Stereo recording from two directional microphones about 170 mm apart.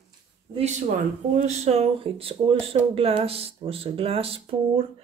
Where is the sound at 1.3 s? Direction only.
40° right (ahead or behind).